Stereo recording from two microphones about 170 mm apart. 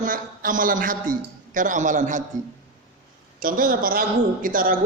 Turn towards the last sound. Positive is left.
turn(degrees=-55)  # may be behind; listen again after turning